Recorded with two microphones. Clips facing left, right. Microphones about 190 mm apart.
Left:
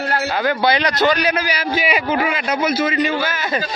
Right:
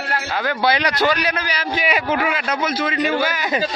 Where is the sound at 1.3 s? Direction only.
10° left (ahead or behind).